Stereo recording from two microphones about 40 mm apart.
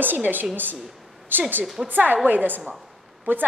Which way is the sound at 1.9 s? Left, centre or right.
Right.